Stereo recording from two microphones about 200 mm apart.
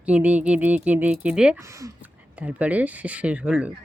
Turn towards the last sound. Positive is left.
turn(degrees=-5)  # may be behind; listen again after turning